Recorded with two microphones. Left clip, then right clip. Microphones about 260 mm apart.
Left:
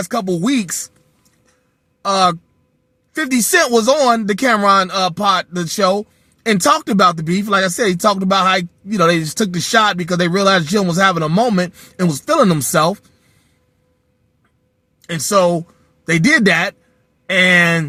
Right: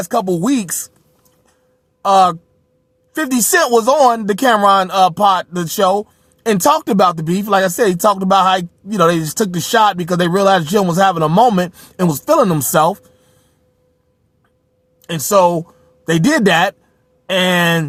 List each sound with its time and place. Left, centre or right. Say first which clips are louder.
0.0 s speech: right 3 dB; right
3.2 s speech: even; right
15.1 s speech: right 2 dB; right